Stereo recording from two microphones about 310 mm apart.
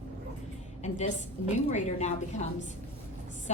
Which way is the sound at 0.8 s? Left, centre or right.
Left.